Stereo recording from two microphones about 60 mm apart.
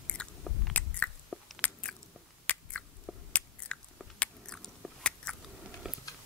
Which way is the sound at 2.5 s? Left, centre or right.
Left.